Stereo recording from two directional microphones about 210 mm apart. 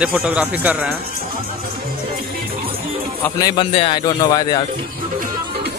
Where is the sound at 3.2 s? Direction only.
20° left (ahead or behind).